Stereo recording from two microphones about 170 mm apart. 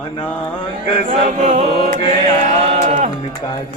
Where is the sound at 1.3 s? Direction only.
40° right (ahead or behind).